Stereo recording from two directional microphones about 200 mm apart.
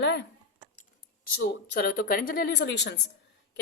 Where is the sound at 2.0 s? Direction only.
45° left (ahead or behind).